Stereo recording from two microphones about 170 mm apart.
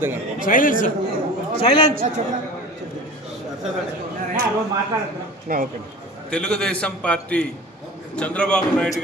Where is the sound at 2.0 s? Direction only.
45° right (ahead or behind).